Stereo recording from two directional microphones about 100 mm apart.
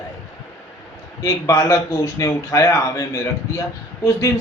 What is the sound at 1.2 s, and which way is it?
Speech, 35° left (ahead or behind).